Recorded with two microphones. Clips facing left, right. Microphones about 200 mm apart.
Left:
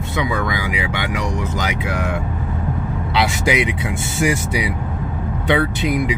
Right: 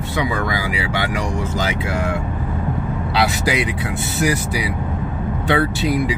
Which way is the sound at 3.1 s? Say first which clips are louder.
Left 1 dB; 20° left (ahead or behind).